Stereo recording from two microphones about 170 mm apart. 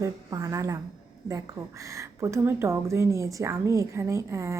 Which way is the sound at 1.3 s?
15° right (ahead or behind).